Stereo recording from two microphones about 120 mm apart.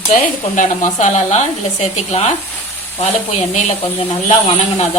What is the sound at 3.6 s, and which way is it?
Speech, 70° left (ahead or behind).